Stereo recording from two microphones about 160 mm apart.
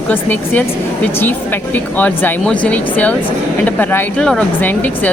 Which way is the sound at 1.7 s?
10° left (ahead or behind).